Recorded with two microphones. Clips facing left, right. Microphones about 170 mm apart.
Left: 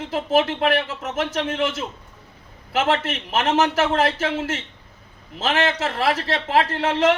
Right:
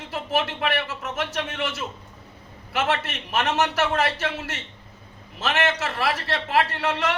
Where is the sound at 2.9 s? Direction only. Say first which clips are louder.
Left 4 dB; 50° left (ahead or behind).